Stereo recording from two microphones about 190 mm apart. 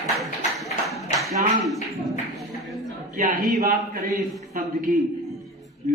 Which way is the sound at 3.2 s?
45° right (ahead or behind).